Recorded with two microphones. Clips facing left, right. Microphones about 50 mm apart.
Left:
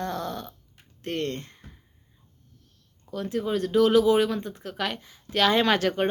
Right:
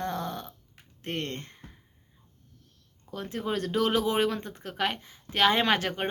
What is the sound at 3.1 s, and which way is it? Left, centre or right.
Speech, right.